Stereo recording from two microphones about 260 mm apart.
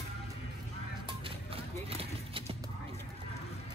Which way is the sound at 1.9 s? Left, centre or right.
Right.